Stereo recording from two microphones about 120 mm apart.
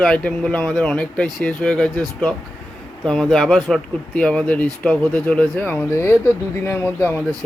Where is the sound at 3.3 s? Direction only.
5° left (ahead or behind).